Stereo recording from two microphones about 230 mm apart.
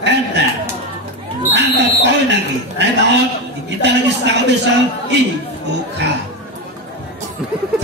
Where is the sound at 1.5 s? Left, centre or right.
Right.